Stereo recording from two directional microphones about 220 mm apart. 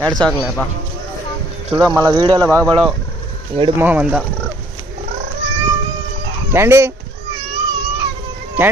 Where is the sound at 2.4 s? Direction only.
5° left (ahead or behind).